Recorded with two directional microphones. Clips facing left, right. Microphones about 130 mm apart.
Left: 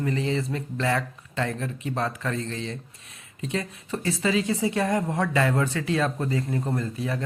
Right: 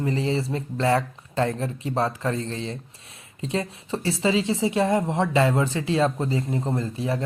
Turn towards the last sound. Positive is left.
turn(degrees=-25)  # may be behind; listen again after turning